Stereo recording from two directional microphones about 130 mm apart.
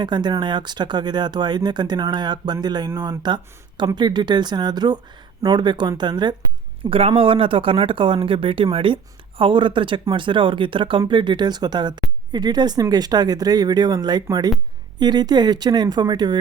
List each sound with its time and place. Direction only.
0.0 s speech: 35° right (ahead or behind)